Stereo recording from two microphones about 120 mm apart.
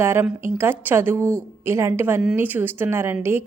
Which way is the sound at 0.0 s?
20° right (ahead or behind).